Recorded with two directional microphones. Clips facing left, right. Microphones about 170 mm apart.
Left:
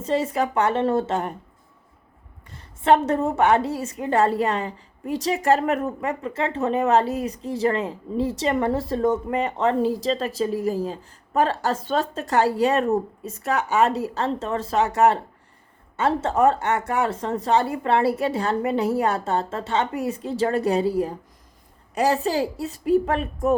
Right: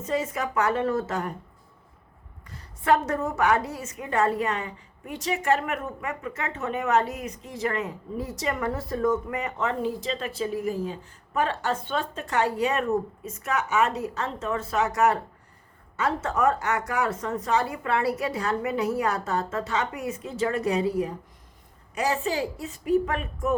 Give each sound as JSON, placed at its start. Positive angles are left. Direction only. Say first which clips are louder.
{"t": 0.0, "sound": "speech", "louder": "left 5 dB", "side_deg": 30}
{"t": 2.5, "sound": "a woman's voice", "louder": "left 4 dB", "side_deg": 25}